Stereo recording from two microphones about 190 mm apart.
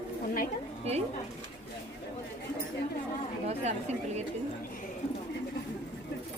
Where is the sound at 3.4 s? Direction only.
35° right (ahead or behind).